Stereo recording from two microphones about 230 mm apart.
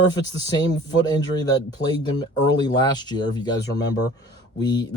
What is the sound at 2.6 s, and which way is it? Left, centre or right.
Speech, centre.